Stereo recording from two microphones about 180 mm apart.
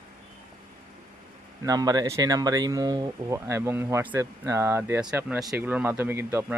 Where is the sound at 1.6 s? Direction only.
20° right (ahead or behind).